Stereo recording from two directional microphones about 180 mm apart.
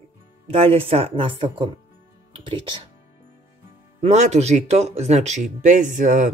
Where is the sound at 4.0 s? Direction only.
40° right (ahead or behind).